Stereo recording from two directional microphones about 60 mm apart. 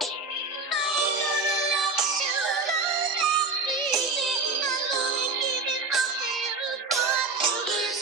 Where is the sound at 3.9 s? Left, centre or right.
Centre.